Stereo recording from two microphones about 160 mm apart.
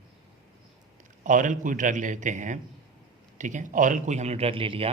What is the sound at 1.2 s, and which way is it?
A man's voice, 55° right (ahead or behind).